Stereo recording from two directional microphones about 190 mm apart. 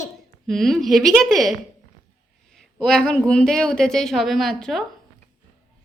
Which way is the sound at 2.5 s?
5° left (ahead or behind).